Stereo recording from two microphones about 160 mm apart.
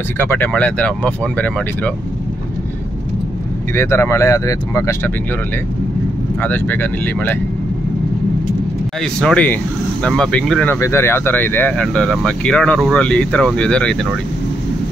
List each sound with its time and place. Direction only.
0.2 s speech: 15° left (ahead or behind)
3.7 s speech: 15° left (ahead or behind)
6.4 s speech: 10° left (ahead or behind)
9.0 s speech: 5° left (ahead or behind)
10.7 s speech: 15° left (ahead or behind)